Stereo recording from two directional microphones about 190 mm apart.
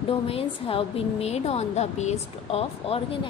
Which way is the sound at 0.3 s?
30° left (ahead or behind).